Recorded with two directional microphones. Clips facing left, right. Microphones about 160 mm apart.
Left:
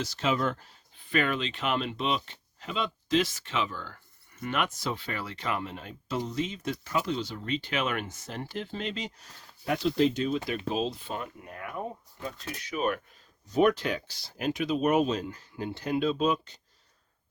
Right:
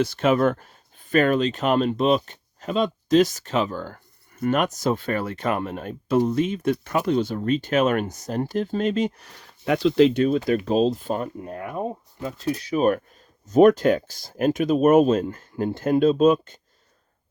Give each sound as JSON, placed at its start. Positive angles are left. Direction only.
{"t": 0.0, "sound": "speech", "side_deg": -55}
{"t": 10.2, "sound": "speech", "side_deg": -45}